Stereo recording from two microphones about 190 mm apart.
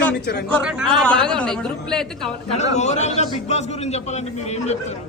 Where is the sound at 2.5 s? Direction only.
35° left (ahead or behind).